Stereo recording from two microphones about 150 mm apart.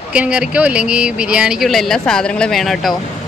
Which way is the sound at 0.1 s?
10° right (ahead or behind).